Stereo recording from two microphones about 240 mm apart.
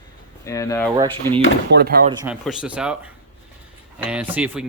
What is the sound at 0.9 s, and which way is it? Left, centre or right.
Speech, right.